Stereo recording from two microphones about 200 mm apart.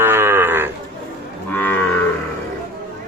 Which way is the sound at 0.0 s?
10° right (ahead or behind).